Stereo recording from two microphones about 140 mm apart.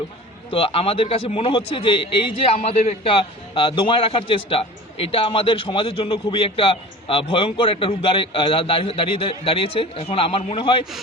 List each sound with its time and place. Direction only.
0.5 s a man's voice: 40° left (ahead or behind)
2.6 s a man's voice: 50° left (ahead or behind)